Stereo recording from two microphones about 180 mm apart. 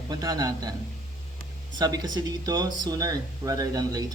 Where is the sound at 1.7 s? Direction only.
20° right (ahead or behind).